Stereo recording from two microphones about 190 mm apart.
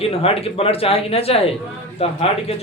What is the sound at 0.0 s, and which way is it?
Speech, 30° left (ahead or behind).